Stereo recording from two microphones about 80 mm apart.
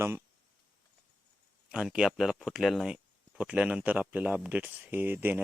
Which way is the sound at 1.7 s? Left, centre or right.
Centre.